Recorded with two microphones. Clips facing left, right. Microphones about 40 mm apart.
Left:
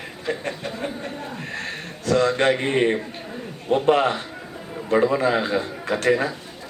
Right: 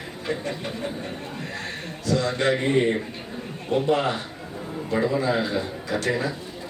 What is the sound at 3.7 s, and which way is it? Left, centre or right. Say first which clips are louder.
A man's voice: left 4 dB; left.